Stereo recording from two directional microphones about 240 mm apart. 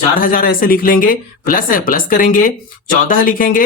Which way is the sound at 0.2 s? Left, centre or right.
Left.